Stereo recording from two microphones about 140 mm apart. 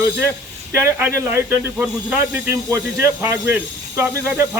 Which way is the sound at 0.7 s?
15° right (ahead or behind).